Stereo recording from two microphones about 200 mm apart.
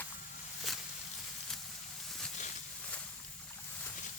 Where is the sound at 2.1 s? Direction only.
Centre (ahead or behind).